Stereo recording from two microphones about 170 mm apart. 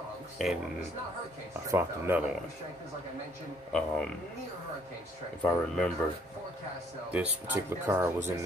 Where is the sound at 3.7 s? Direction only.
5° left (ahead or behind).